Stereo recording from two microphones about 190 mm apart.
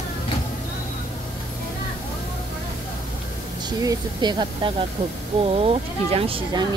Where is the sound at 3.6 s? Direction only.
20° right (ahead or behind).